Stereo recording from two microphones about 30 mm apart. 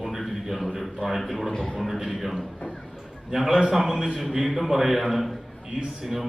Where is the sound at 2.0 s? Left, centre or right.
Centre.